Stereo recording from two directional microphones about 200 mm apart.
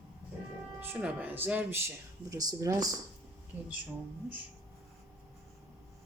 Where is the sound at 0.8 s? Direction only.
10° right (ahead or behind).